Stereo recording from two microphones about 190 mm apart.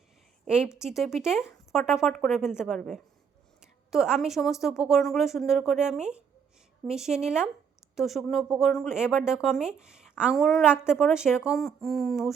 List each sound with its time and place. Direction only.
0.4 s a woman's voice: 5° right (ahead or behind)